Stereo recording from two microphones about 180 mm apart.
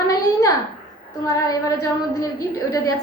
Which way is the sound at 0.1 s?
20° left (ahead or behind).